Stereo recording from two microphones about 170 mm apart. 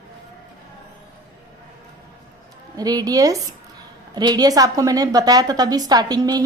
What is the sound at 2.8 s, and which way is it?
A woman's voice, 20° right (ahead or behind).